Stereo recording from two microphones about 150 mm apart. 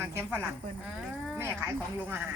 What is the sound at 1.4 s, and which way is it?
Speech, 15° right (ahead or behind).